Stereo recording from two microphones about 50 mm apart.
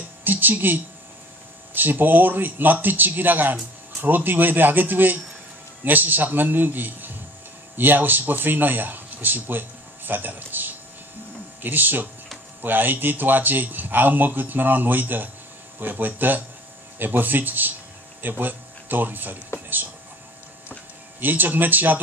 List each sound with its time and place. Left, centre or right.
0.2 s a man's voice: right
21.2 s a man's voice: right